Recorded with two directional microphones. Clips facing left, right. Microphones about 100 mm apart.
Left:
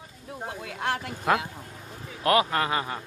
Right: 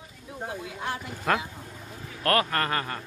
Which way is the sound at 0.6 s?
70° left (ahead or behind).